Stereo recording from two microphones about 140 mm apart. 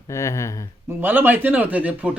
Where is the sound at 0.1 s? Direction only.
20° left (ahead or behind).